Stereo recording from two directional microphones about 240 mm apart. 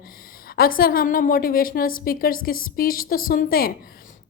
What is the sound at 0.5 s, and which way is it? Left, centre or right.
A woman's voice, left.